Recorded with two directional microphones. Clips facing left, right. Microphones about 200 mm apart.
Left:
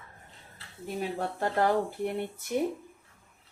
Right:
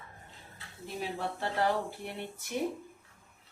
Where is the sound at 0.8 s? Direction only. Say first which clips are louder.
Left 4 dB; 45° left (ahead or behind).